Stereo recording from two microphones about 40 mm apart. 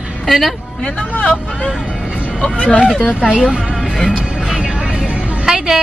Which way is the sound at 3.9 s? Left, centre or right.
Centre.